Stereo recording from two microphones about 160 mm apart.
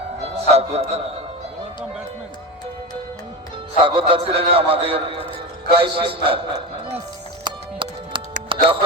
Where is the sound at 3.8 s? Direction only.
35° right (ahead or behind).